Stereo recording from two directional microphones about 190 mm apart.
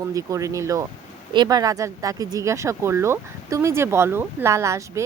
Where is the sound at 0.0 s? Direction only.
15° right (ahead or behind).